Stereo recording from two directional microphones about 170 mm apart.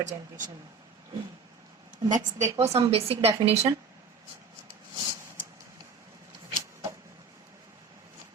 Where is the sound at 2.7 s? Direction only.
35° right (ahead or behind).